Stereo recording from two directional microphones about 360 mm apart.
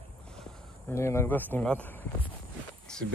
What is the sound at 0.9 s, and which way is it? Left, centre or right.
Speech, centre.